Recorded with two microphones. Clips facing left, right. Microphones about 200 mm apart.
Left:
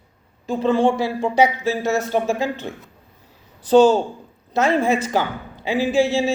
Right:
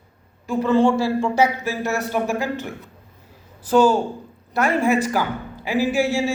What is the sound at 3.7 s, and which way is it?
Speech, 20° left (ahead or behind).